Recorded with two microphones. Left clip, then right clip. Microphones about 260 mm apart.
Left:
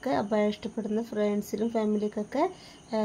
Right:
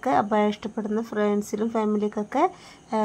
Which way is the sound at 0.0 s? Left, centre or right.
Centre.